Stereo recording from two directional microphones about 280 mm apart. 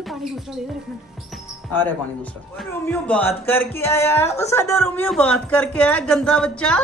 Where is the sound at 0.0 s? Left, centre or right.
Centre.